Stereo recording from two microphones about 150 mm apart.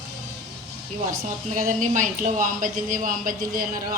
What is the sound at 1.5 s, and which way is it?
Speech, 60° right (ahead or behind).